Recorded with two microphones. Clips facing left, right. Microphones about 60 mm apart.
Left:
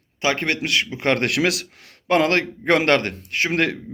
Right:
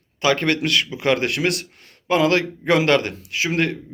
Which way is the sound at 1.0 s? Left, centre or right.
Left.